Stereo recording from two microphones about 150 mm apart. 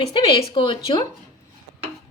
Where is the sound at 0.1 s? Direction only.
35° left (ahead or behind).